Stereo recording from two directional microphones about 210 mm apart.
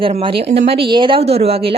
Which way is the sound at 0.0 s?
25° right (ahead or behind).